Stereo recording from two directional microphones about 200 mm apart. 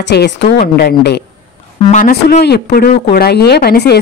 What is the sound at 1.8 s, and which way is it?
Speech, 35° left (ahead or behind).